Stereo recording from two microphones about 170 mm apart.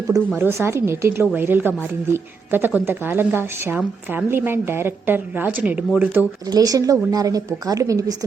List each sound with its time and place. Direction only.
0.3 s a woman's voice: 15° right (ahead or behind)
6.5 s a woman's voice: 20° right (ahead or behind)